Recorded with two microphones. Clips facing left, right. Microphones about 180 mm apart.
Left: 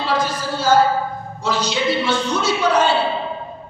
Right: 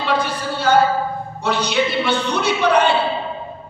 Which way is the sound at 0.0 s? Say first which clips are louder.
Even; 60° right (ahead or behind).